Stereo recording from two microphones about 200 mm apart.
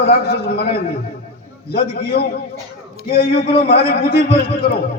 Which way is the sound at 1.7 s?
55° left (ahead or behind).